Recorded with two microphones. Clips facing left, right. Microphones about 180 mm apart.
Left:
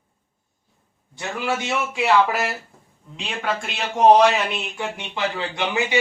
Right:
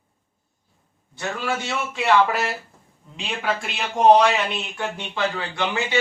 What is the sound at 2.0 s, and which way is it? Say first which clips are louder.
Speech: even; 5° left (ahead or behind).